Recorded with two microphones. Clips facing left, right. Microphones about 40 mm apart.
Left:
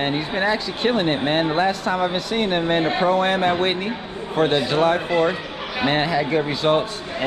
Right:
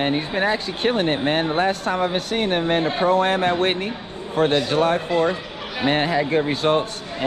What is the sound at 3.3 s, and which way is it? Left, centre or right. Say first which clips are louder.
Speech: even; left.